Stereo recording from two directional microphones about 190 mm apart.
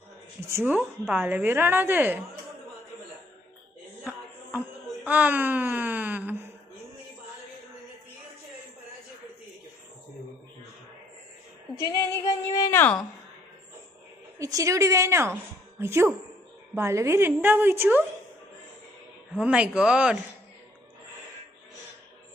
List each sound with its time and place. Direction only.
0.4 s a woman's voice: 10° right (ahead or behind)
5.0 s a sound: 10° right (ahead or behind)
11.8 s a woman's voice: 15° left (ahead or behind)
14.3 s a woman's voice: 15° right (ahead or behind)
19.3 s speech: 5° right (ahead or behind)